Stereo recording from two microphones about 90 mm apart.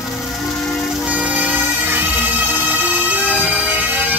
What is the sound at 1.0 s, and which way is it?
Bagpipes, 15° right (ahead or behind).